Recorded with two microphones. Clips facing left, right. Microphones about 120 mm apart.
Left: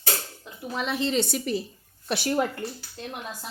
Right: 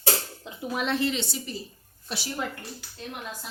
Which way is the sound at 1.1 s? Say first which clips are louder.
Left 7 dB; 50° left (ahead or behind).